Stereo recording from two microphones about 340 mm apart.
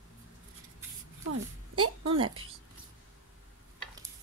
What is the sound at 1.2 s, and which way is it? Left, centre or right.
Speech, right.